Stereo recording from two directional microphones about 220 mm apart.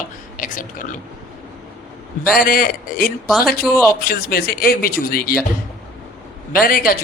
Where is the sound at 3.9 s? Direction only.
45° left (ahead or behind).